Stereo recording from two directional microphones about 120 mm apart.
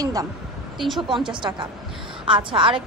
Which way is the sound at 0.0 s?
30° right (ahead or behind).